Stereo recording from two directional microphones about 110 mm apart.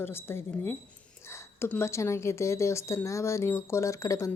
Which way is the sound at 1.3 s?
25° left (ahead or behind).